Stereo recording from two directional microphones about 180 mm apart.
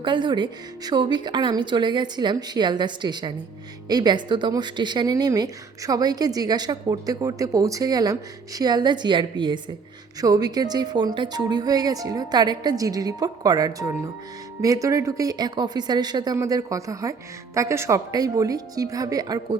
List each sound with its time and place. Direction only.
0.0 s a woman's voice: 25° right (ahead or behind)